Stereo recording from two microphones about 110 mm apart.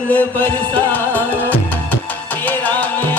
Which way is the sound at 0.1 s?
15° left (ahead or behind).